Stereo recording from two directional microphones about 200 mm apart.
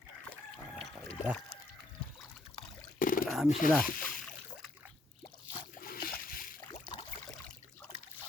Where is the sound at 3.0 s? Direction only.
45° left (ahead or behind).